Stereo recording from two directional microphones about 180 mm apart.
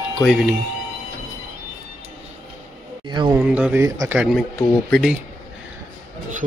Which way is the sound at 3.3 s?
10° right (ahead or behind).